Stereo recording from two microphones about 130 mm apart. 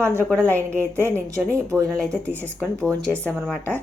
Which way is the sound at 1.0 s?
20° right (ahead or behind).